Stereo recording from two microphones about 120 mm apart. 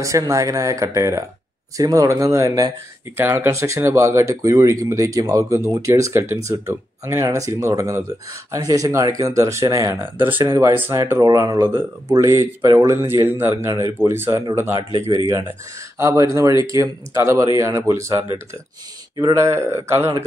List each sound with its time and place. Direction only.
0.0 s speech: 25° right (ahead or behind)
16.0 s speech: 25° right (ahead or behind)